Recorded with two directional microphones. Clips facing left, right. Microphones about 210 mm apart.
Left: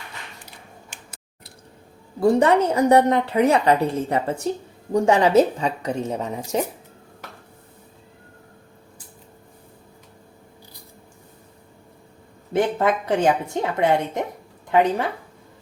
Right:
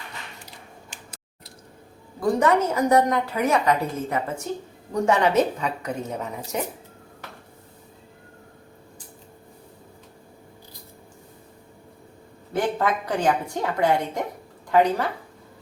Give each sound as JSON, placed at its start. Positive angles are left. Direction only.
{"t": 0.9, "sound": "tick-tock", "side_deg": 55}
{"t": 2.2, "sound": "a woman's voice", "side_deg": 30}
{"t": 12.5, "sound": "a woman's voice", "side_deg": 25}